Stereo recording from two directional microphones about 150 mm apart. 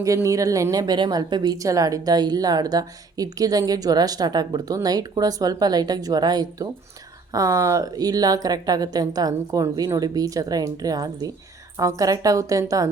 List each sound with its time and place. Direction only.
0.0 s a woman's voice: 20° right (ahead or behind)